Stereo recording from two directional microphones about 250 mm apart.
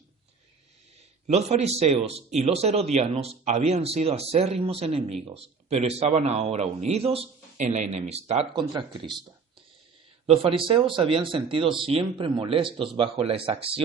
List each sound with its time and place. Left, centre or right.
1.3 s speech: right
10.2 s speech: right